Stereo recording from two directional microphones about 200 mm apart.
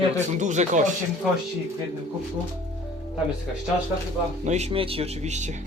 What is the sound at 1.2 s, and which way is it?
Speech, centre (ahead or behind).